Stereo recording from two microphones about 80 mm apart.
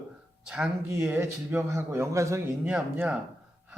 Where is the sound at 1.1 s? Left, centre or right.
Right.